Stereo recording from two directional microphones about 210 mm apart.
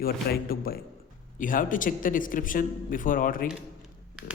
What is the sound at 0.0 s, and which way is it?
A man's voice, 45° left (ahead or behind).